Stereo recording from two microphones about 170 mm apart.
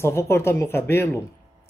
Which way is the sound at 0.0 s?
15° left (ahead or behind).